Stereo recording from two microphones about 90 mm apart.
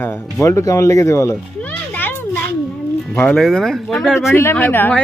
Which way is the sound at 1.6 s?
20° left (ahead or behind).